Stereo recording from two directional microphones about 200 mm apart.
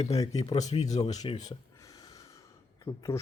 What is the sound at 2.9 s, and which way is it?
Speech, 15° left (ahead or behind).